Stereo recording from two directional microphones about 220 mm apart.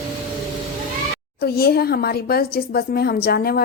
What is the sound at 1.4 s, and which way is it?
Speech, 45° left (ahead or behind).